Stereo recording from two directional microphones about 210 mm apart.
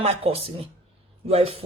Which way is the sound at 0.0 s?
30° right (ahead or behind).